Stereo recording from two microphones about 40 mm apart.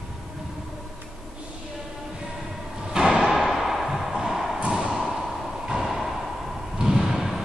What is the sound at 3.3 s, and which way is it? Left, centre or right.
Thump, centre.